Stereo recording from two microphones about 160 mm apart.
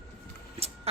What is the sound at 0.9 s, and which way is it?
Speech, 40° right (ahead or behind).